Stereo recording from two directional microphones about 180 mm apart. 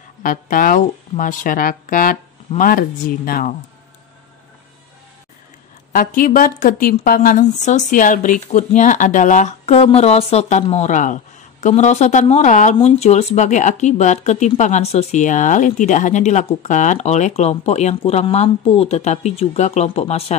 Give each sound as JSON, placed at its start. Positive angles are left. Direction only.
{"t": 0.2, "sound": "a woman's voice", "side_deg": 50}
{"t": 5.9, "sound": "a woman's voice", "side_deg": 50}